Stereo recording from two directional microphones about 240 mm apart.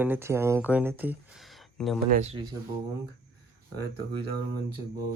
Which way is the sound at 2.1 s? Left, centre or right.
Right.